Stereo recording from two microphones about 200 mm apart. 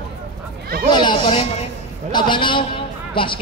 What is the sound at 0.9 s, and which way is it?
Speech, 20° left (ahead or behind).